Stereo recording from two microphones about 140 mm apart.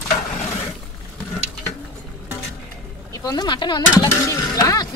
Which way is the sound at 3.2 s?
30° left (ahead or behind).